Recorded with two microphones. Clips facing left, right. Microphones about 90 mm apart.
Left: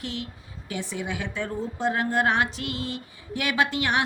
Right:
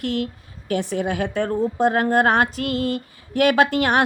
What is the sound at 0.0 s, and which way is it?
Speech, 60° right (ahead or behind).